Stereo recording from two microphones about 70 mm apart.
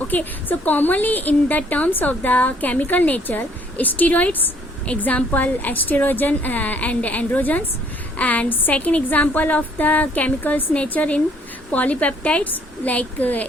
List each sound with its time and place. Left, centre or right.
0.1 s a woman's voice: left